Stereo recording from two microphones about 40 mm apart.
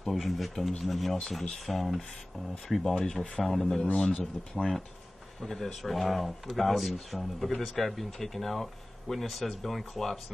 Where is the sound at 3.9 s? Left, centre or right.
Left.